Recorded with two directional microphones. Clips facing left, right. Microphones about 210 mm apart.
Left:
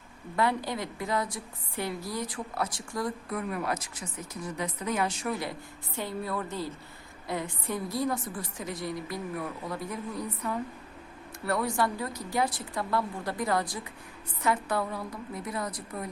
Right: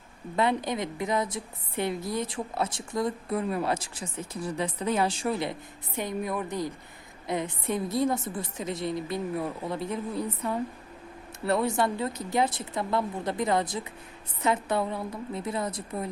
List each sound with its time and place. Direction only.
0.3 s a woman's voice: 20° right (ahead or behind)